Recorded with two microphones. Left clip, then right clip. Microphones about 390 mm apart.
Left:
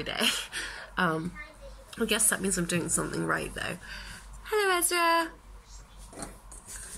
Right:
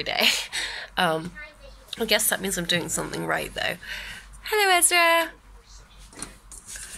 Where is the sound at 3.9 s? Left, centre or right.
Centre.